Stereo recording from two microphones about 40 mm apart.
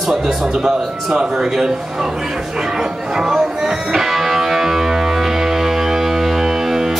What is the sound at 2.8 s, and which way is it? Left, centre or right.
Music, centre.